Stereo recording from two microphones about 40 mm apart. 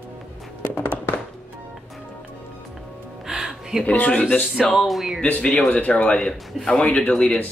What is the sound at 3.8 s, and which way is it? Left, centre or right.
Speech, left.